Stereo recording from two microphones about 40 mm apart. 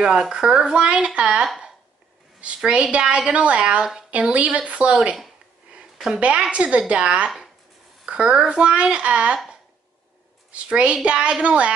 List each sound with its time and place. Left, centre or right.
0.3 s a woman's voice: centre; by 5.1 s right
6.1 s speech: right
10.5 s a woman's voice: right